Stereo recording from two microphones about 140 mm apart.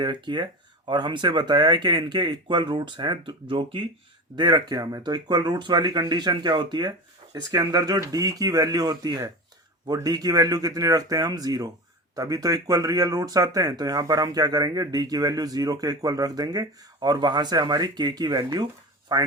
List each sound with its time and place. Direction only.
0.0 s speech: 35° right (ahead or behind)